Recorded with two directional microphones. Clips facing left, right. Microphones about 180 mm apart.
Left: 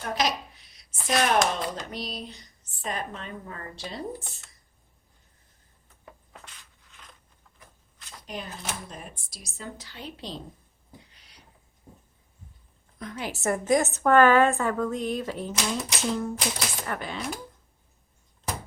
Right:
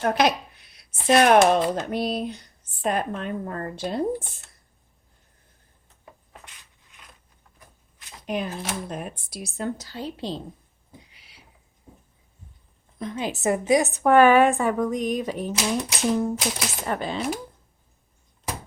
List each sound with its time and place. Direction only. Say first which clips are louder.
0.0 s a sound: right 7 dB; 60° right (ahead or behind)
1.0 s speech: right 8 dB; 55° right (ahead or behind)
8.9 s speech: right 9 dB; 65° right (ahead or behind)
9.8 s a woman's voice: right 7 dB; 35° right (ahead or behind)
11.1 s a sound: right 1 dB; 5° right (ahead or behind)
13.0 s a woman's voice: right 5 dB; 20° right (ahead or behind)